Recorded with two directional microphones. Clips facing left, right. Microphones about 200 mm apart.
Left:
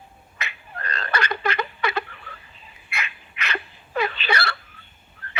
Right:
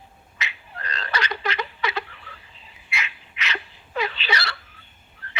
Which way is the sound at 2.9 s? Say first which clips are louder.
Even; 55° left (ahead or behind).